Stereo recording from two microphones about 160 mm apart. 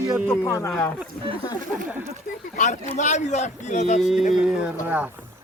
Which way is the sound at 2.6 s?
50° left (ahead or behind).